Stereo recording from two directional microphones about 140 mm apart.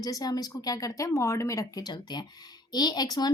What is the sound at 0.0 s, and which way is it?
Speech, 25° left (ahead or behind).